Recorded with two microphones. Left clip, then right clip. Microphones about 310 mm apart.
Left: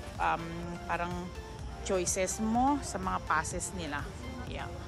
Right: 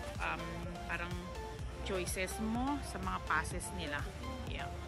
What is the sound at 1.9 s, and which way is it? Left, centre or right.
Speech, centre.